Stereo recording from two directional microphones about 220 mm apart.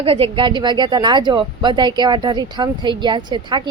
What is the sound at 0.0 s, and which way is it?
A woman's voice, 25° right (ahead or behind).